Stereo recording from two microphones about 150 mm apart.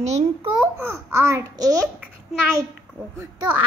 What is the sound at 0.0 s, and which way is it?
Speech, 45° right (ahead or behind).